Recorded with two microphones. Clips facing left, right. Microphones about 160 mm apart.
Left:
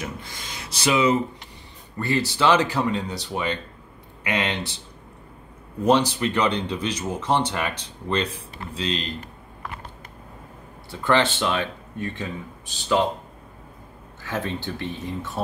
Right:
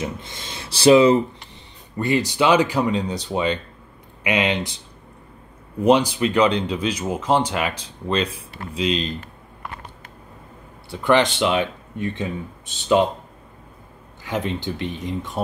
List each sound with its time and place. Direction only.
0.0 s speech: 25° right (ahead or behind)
2.0 s speech: 15° right (ahead or behind)
5.9 s speech: 15° right (ahead or behind)
8.7 s speech: 15° right (ahead or behind)
10.9 s speech: 15° right (ahead or behind)
14.2 s speech: 15° right (ahead or behind)